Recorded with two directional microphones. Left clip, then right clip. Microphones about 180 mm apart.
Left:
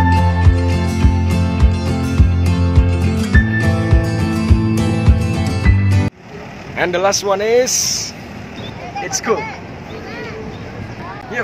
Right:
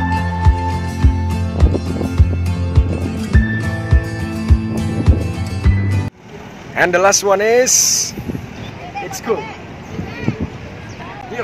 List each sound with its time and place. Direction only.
0.1 s music: centre (ahead or behind)
6.7 s speech: 35° right (ahead or behind)